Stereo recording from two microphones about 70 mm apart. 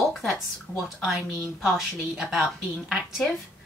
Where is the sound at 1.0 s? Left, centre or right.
Centre.